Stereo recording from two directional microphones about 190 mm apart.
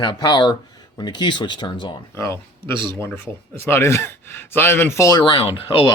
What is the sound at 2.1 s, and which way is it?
Speech, 10° left (ahead or behind).